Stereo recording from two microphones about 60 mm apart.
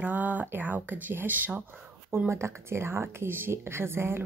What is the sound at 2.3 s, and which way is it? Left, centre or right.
Speech, right.